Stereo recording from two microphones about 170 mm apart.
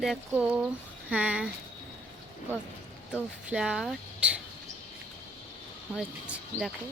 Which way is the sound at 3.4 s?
5° right (ahead or behind).